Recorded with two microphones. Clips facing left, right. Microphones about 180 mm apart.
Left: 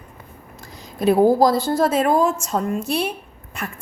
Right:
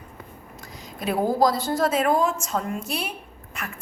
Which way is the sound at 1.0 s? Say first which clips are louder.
Left 7 dB; 30° left (ahead or behind).